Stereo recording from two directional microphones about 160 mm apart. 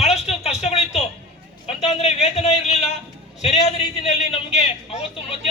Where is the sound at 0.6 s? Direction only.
40° left (ahead or behind).